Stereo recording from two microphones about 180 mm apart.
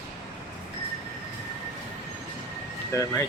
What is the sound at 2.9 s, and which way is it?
Speech, 15° left (ahead or behind).